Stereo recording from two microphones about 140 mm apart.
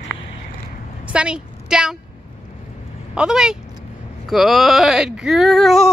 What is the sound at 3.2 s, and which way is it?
Speech, 5° right (ahead or behind).